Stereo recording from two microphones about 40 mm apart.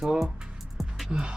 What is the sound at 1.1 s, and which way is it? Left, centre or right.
Music, right.